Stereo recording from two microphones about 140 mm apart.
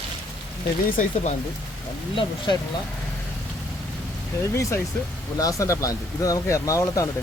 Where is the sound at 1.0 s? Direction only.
65° left (ahead or behind).